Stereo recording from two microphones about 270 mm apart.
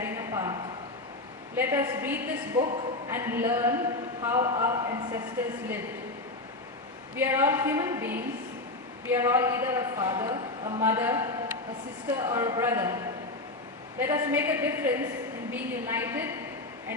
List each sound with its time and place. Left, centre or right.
0.0 s a sound: centre
1.5 s a man's voice: centre
7.2 s a man's voice: centre
13.9 s a man's voice: centre